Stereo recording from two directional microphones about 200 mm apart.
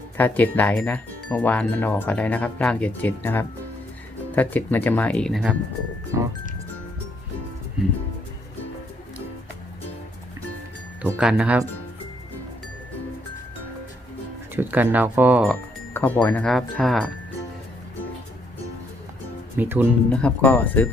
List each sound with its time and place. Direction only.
0.2 s speech: 10° left (ahead or behind)
6.1 s speech: 15° right (ahead or behind)
11.0 s speech: 5° right (ahead or behind)
14.5 s speech: 10° right (ahead or behind)
15.9 s music: 10° left (ahead or behind)
16.2 s speech: 5° left (ahead or behind)
19.5 s speech: 10° right (ahead or behind)
20.1 s speech: 5° left (ahead or behind)